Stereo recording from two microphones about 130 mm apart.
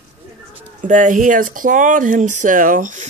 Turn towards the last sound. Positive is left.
turn(degrees=-85)